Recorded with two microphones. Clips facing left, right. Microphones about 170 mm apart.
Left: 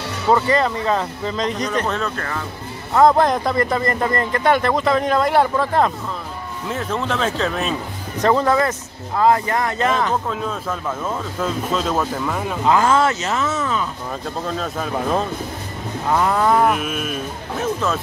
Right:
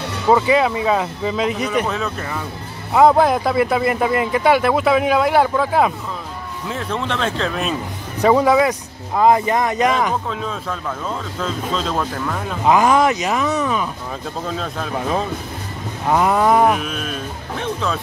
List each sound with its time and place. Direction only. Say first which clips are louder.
0.3 s a man's voice: right 2 dB; 10° right (ahead or behind)
8.2 s a man's voice: right 3 dB; 10° right (ahead or behind)
10.3 s speech: left 1 dB; 5° left (ahead or behind)
12.6 s a man's voice: right 2 dB; 15° right (ahead or behind)
14.5 s speech: left 1 dB; centre (ahead or behind)
16.1 s a man's voice: right 2 dB; 15° right (ahead or behind)
16.6 s speech: right 1 dB; 5° left (ahead or behind)